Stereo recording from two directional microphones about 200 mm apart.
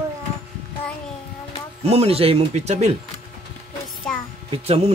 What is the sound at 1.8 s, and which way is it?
Speech, 30° right (ahead or behind).